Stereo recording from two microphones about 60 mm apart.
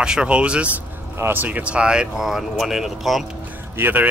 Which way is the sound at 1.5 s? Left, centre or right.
Right.